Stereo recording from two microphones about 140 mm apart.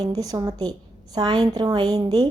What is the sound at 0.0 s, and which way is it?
A woman's voice, 25° right (ahead or behind).